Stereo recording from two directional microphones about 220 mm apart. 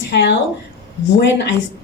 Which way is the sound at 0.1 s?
50° left (ahead or behind).